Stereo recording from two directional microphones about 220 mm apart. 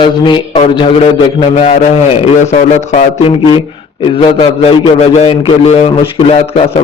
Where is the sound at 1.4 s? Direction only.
35° left (ahead or behind).